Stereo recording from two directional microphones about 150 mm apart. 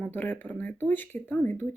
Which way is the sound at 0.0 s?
10° left (ahead or behind).